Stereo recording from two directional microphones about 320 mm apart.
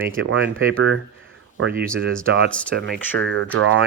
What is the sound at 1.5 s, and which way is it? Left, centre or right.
Speech, right.